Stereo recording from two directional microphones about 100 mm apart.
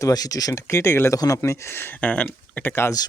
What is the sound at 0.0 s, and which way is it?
Speech, 40° left (ahead or behind).